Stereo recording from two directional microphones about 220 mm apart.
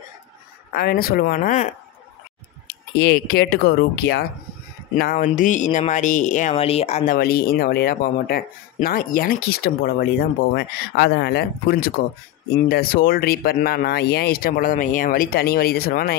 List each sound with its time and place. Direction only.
0.7 s speech: 45° left (ahead or behind)
3.0 s speech: 45° left (ahead or behind); by 7.2 s 30° left (ahead or behind)
7.2 s speech: 45° left (ahead or behind)